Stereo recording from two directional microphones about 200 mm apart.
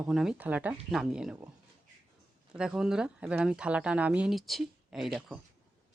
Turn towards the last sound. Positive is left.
turn(degrees=-5)  # may be behind; listen again after turning